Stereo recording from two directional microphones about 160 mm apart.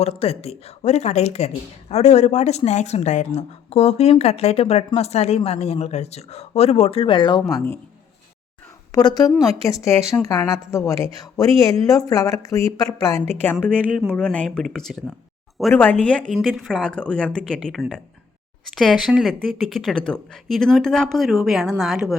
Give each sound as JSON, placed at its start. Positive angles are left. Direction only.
{"t": 0.0, "sound": "speech", "side_deg": 40}
{"t": 7.5, "sound": "a woman's voice", "side_deg": 15}
{"t": 8.9, "sound": "a woman's voice", "side_deg": 25}
{"t": 10.0, "sound": "speech", "side_deg": -5}
{"t": 10.2, "sound": "a woman's voice", "side_deg": 20}